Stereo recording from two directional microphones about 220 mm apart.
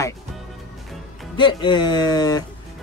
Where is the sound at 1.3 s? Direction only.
20° left (ahead or behind).